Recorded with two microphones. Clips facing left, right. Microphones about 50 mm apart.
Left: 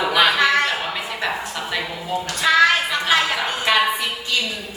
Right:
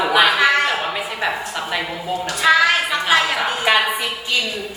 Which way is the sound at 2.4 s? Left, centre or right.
Centre.